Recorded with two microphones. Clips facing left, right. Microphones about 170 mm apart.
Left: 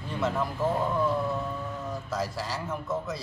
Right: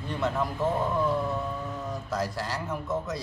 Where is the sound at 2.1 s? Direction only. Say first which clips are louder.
Right 1 dB; centre (ahead or behind).